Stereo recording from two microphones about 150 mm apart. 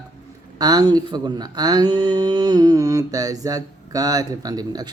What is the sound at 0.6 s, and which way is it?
Speech, 25° right (ahead or behind).